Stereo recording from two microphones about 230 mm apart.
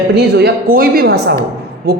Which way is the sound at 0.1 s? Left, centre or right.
Right.